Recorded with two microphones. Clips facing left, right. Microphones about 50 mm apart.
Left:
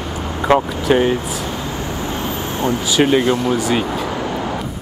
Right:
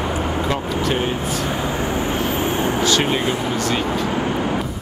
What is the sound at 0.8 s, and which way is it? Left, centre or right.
Speech, centre.